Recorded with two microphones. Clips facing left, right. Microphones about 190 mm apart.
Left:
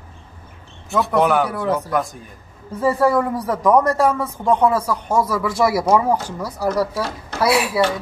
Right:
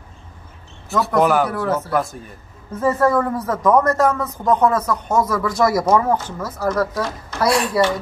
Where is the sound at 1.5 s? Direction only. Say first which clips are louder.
Even; 15° left (ahead or behind).